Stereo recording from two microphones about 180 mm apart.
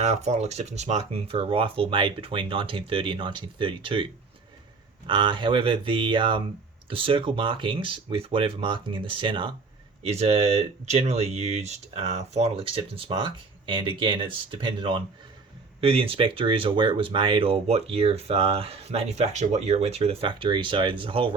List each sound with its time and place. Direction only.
0.0 s speech: 35° right (ahead or behind)